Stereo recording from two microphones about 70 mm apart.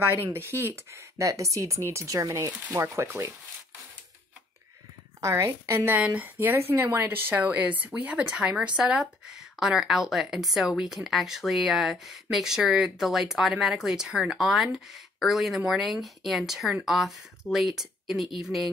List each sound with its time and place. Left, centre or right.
0.0 s speech: right
2.7 s a woman's voice: right
5.2 s a woman's voice: right
5.9 s speech: right
6.5 s a woman's voice: right; by 18.7 s centre